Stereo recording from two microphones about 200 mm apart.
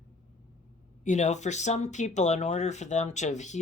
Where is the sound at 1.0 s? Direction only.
35° left (ahead or behind).